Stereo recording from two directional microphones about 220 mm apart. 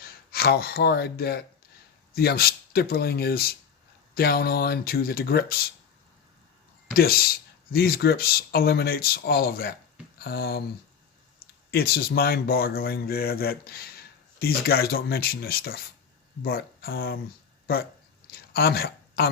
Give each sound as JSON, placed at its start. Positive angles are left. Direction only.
{"t": 0.0, "sound": "speech", "side_deg": 45}
{"t": 6.9, "sound": "speech", "side_deg": 45}
{"t": 11.7, "sound": "speech", "side_deg": 45}
{"t": 18.3, "sound": "a sound", "side_deg": 45}